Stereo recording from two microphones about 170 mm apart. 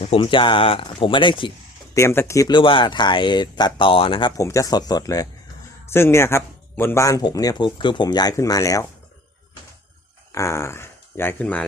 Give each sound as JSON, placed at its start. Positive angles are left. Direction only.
{"t": 0.2, "sound": "speech", "side_deg": 30}
{"t": 2.0, "sound": "speech", "side_deg": 15}
{"t": 4.4, "sound": "speech", "side_deg": 20}
{"t": 10.3, "sound": "speech", "side_deg": 15}